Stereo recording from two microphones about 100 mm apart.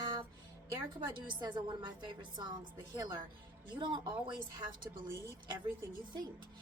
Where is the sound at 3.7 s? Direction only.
50° right (ahead or behind).